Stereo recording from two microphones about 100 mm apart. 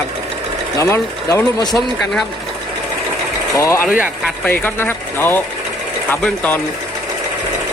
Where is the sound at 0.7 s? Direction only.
30° left (ahead or behind).